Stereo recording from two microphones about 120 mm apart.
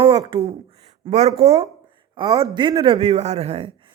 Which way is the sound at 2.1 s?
30° right (ahead or behind).